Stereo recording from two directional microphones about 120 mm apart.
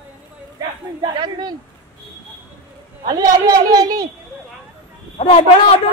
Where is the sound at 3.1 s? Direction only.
30° right (ahead or behind).